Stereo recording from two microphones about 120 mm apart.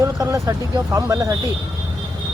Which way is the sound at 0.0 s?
25° right (ahead or behind).